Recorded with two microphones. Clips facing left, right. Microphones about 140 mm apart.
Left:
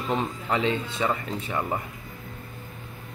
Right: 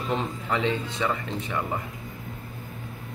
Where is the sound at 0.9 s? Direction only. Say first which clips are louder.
Left 1 dB; 25° left (ahead or behind).